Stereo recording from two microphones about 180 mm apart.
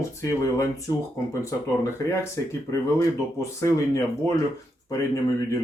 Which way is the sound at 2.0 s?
20° left (ahead or behind).